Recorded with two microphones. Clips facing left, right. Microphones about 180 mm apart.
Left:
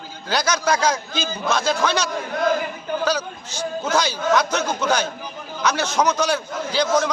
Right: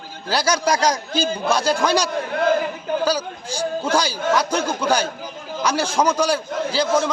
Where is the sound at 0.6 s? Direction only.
15° right (ahead or behind).